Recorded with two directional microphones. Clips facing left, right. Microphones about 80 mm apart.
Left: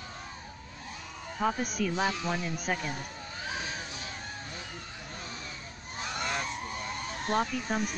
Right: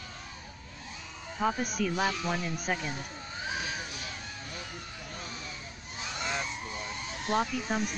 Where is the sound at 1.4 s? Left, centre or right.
Centre.